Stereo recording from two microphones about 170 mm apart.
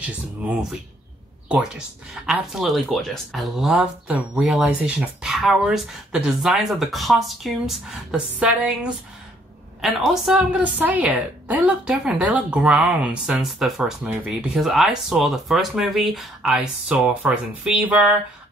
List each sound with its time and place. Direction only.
0.0 s a woman's voice: 10° right (ahead or behind)